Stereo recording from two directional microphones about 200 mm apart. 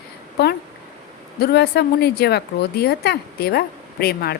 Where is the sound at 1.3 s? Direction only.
55° left (ahead or behind).